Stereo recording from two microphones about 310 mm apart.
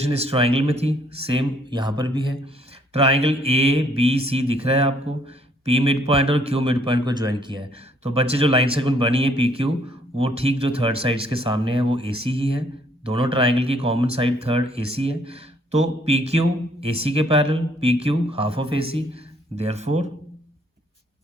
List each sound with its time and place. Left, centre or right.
0.0 s speech: centre